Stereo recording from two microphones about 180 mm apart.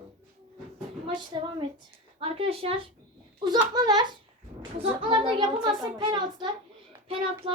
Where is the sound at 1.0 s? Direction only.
25° right (ahead or behind).